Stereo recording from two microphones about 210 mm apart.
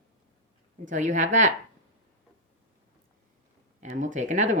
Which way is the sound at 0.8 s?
35° right (ahead or behind).